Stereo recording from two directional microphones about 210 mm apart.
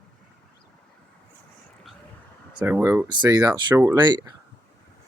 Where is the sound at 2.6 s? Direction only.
10° right (ahead or behind).